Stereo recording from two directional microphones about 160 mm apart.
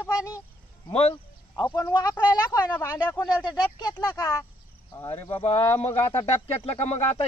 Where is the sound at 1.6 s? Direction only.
20° left (ahead or behind).